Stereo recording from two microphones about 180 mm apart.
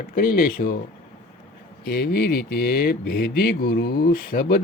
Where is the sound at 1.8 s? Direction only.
60° left (ahead or behind).